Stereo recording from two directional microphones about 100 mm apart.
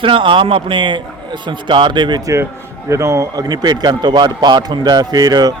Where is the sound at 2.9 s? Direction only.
30° right (ahead or behind).